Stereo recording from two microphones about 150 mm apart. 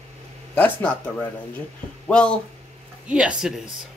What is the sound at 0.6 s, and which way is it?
Speech, 10° left (ahead or behind).